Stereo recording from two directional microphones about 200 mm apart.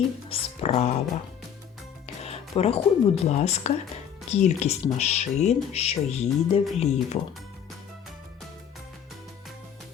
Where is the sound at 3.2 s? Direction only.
35° left (ahead or behind).